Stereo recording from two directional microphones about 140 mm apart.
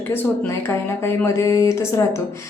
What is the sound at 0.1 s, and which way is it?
Speech, 15° left (ahead or behind).